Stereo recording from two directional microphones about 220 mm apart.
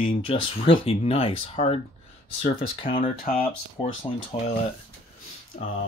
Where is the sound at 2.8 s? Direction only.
25° left (ahead or behind).